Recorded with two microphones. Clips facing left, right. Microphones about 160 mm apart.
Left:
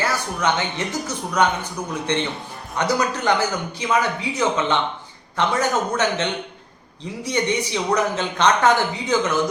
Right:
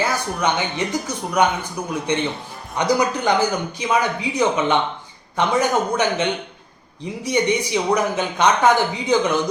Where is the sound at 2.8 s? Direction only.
15° right (ahead or behind).